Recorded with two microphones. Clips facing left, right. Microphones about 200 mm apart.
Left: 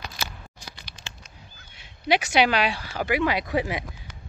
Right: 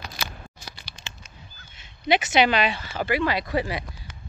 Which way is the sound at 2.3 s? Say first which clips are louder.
Right 1 dB; 10° left (ahead or behind).